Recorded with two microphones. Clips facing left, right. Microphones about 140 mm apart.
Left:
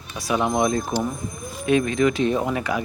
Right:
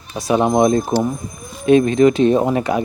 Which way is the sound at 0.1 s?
30° right (ahead or behind).